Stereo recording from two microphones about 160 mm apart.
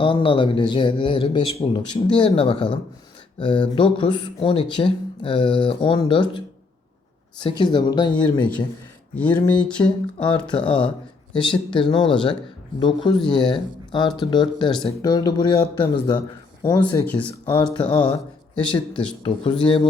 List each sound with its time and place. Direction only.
0.0 s speech: 30° left (ahead or behind)
9.1 s a sound: 10° left (ahead or behind)
9.8 s speech: 25° left (ahead or behind)